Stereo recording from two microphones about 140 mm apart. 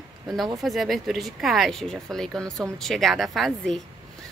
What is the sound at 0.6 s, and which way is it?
A woman's voice, centre (ahead or behind).